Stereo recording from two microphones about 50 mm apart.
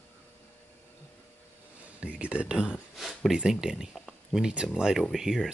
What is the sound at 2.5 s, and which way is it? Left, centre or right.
Speech, centre.